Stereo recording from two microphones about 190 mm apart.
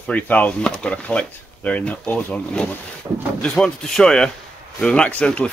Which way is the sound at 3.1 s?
15° right (ahead or behind).